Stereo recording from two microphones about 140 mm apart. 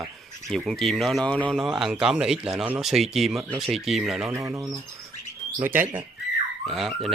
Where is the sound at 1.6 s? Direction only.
Centre (ahead or behind).